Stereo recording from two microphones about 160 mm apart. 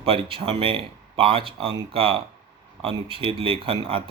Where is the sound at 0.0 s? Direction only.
35° right (ahead or behind).